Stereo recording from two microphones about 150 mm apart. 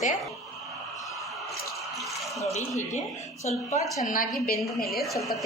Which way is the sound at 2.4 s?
50° left (ahead or behind).